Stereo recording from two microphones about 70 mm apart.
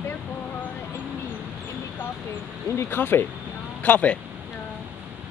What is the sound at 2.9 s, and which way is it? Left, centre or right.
Speech, left.